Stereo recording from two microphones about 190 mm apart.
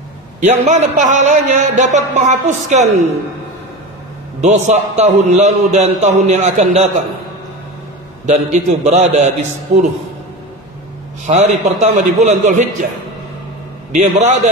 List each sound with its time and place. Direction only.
0.4 s a man's voice: 40° right (ahead or behind)
4.4 s a man's voice: 35° right (ahead or behind)
8.3 s a man's voice: 40° right (ahead or behind)
11.2 s a man's voice: 40° right (ahead or behind)
13.9 s a man's voice: 40° right (ahead or behind)